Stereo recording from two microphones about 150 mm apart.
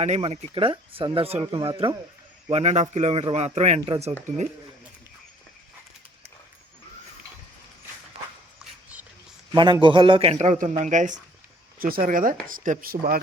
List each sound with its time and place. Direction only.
0.0 s a man's voice: 45° right (ahead or behind)
9.6 s a man's voice: 30° right (ahead or behind); by 11.2 s 55° right (ahead or behind)
11.8 s speech: 75° right (ahead or behind)